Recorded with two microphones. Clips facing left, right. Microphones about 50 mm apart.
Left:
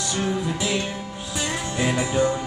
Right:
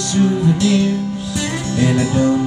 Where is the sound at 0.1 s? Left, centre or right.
Centre.